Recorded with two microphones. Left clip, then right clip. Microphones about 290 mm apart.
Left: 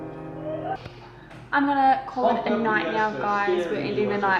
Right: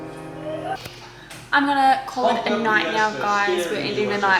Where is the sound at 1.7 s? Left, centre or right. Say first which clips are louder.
Even; centre.